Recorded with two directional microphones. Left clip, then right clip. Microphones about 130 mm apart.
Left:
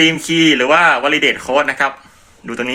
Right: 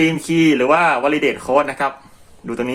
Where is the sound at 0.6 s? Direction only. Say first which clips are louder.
Left 3 dB; 25° right (ahead or behind).